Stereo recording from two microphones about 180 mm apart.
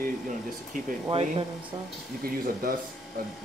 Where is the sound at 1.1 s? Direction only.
30° right (ahead or behind).